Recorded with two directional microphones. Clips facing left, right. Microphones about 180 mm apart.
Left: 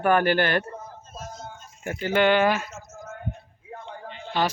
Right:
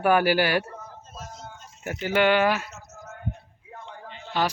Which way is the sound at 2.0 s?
10° right (ahead or behind).